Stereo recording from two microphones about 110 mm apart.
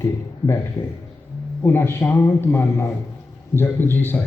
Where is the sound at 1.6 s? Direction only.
25° left (ahead or behind).